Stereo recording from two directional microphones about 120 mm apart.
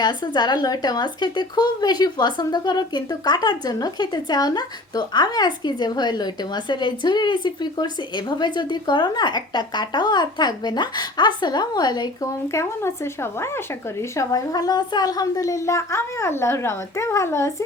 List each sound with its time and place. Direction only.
0.0 s speech: 35° left (ahead or behind)
14.2 s a woman's voice: 30° left (ahead or behind)